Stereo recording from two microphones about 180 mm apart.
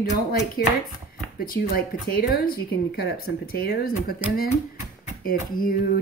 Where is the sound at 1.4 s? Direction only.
55° left (ahead or behind).